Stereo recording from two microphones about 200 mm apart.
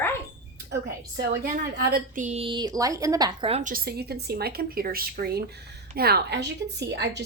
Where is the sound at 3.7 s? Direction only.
50° right (ahead or behind).